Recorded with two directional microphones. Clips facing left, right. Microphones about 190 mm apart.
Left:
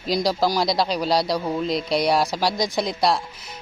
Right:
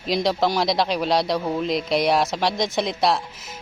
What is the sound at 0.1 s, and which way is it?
Speech, centre (ahead or behind).